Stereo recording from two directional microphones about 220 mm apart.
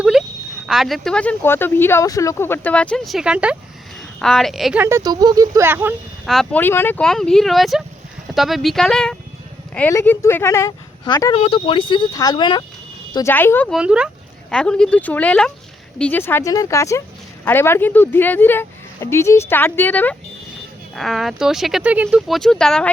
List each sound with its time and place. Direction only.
0.0 s a sound: centre (ahead or behind)
0.7 s speech: centre (ahead or behind)
6.2 s speech: centre (ahead or behind)
13.7 s speech: 5° right (ahead or behind)